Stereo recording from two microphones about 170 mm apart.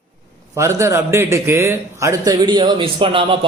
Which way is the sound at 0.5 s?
15° right (ahead or behind).